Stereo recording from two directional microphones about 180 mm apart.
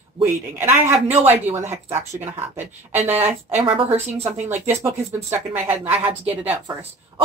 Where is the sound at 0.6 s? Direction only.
15° right (ahead or behind).